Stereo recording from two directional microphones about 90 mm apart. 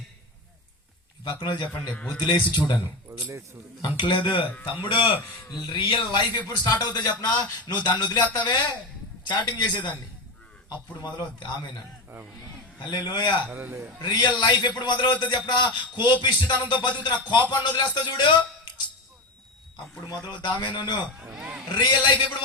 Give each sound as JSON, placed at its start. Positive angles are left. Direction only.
{"t": 1.2, "sound": "a man's voice", "side_deg": 55}
{"t": 1.5, "sound": "a man's voice", "side_deg": 65}
{"t": 3.1, "sound": "speech", "side_deg": -35}
{"t": 3.8, "sound": "a man's voice", "side_deg": 60}
{"t": 5.5, "sound": "a man's voice", "side_deg": 50}
{"t": 6.3, "sound": "a man's voice", "side_deg": 45}
{"t": 11.0, "sound": "a man's voice", "side_deg": 55}
{"t": 12.9, "sound": "a man's voice", "side_deg": 50}
{"t": 13.5, "sound": "a man's voice", "side_deg": -20}
{"t": 14.0, "sound": "a man's voice", "side_deg": 50}
{"t": 20.0, "sound": "speech", "side_deg": 40}
{"t": 20.3, "sound": "a man's voice", "side_deg": 60}
{"t": 21.2, "sound": "a sound", "side_deg": -10}
{"t": 21.8, "sound": "a man's voice", "side_deg": 55}